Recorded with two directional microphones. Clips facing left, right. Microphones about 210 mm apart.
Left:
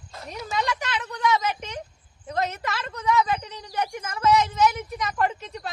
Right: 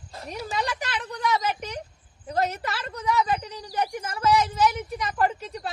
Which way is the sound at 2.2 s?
35° right (ahead or behind).